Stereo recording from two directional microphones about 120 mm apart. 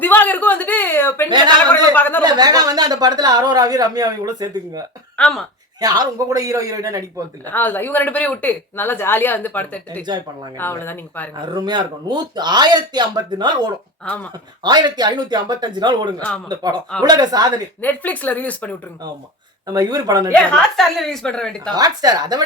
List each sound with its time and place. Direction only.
0.0 s a sound: 15° left (ahead or behind)
2.2 s speech: 35° right (ahead or behind)
5.1 s speech: 5° left (ahead or behind)
5.8 s speech: 30° right (ahead or behind)
7.4 s speech: 15° left (ahead or behind)
11.3 s speech: 35° right (ahead or behind)
14.0 s speech: 10° left (ahead or behind)
14.6 s speech: 35° right (ahead or behind)
16.1 s speech: 10° left (ahead or behind)
16.5 s speech: 35° right (ahead or behind)
17.7 s speech: 15° left (ahead or behind)
19.7 s speech: 30° right (ahead or behind)
20.3 s a woman's voice: 10° left (ahead or behind)
21.7 s speech: 30° right (ahead or behind)